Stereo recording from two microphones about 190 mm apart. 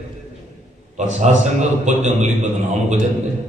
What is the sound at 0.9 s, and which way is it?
A man's voice, 35° right (ahead or behind).